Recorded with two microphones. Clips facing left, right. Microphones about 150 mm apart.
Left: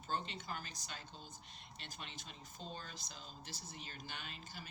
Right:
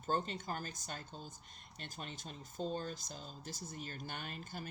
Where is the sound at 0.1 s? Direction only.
45° right (ahead or behind).